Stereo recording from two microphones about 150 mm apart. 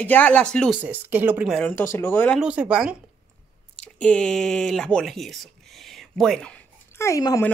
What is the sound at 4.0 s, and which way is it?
Speech, 5° left (ahead or behind).